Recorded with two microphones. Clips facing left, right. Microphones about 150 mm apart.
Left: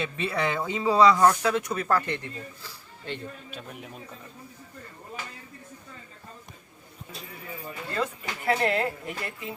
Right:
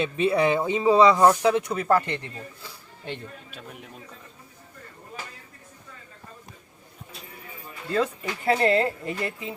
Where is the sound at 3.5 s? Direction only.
Centre (ahead or behind).